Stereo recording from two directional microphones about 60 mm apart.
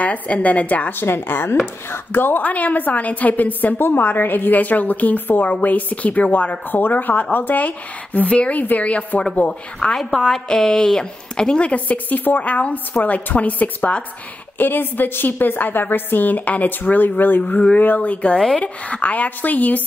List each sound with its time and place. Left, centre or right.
0.0 s a woman's voice: left
0.9 s a woman's voice: left
9.5 s a woman's voice: centre; by 17.1 s left
17.4 s a woman's voice: centre